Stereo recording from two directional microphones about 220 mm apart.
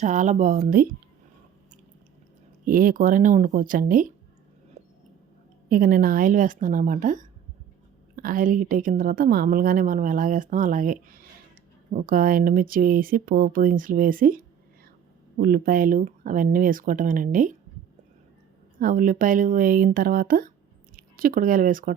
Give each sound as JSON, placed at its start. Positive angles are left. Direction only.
{"t": 0.0, "sound": "a woman's voice", "side_deg": -35}
{"t": 2.6, "sound": "a woman's voice", "side_deg": -40}
{"t": 4.8, "sound": "a sound", "side_deg": -30}
{"t": 5.6, "sound": "a woman's voice", "side_deg": -40}
{"t": 18.8, "sound": "a woman's voice", "side_deg": -40}